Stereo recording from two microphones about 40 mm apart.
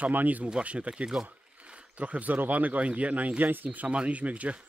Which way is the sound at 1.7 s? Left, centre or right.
Right.